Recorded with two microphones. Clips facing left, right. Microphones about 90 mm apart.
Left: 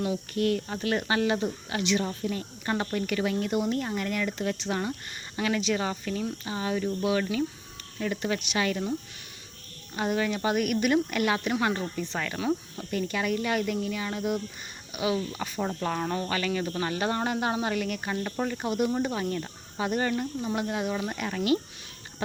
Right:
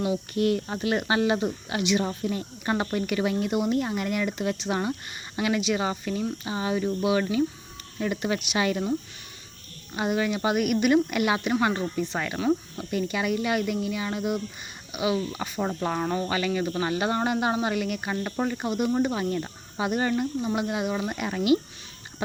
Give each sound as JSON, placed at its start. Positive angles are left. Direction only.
{"t": 0.3, "sound": "speech", "side_deg": -20}